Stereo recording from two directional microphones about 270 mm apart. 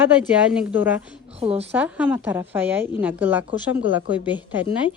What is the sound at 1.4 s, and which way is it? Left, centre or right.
Speech, right.